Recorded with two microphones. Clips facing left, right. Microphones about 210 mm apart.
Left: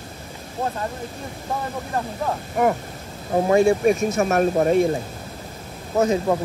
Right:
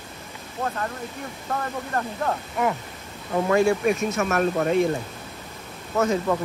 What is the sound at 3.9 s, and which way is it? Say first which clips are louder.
Speech: left 4 dB; 40° left (ahead or behind).